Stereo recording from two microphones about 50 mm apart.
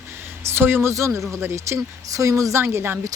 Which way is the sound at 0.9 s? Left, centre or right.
Right.